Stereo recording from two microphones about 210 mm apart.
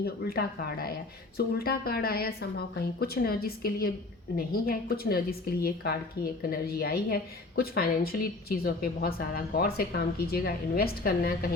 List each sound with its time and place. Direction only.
0.0 s a woman's voice: 45° left (ahead or behind)